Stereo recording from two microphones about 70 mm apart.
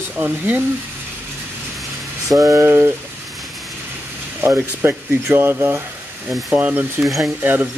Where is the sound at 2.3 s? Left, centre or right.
Right.